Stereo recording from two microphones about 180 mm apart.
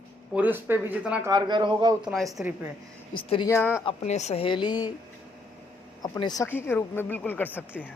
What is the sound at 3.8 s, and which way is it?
A woman's voice, 40° left (ahead or behind).